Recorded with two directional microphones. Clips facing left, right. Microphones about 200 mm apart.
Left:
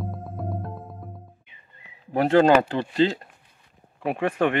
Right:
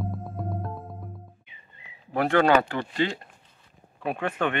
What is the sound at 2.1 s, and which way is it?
Speech, 25° left (ahead or behind).